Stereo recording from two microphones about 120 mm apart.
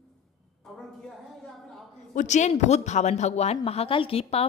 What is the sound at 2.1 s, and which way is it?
Speech, 85° left.